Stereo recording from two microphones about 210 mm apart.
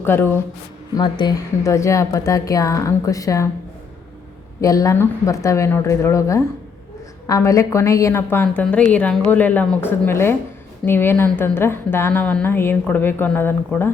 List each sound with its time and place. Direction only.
0.0 s a woman's voice: 10° left (ahead or behind)
0.9 s a woman's voice: 20° left (ahead or behind)
4.6 s a woman's voice: 15° left (ahead or behind)